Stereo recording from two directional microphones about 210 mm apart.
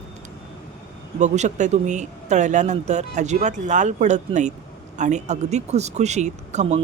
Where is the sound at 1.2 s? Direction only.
35° right (ahead or behind).